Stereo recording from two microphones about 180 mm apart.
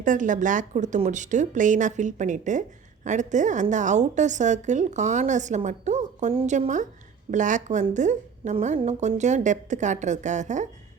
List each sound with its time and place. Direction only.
0.0 s speech: 45° right (ahead or behind)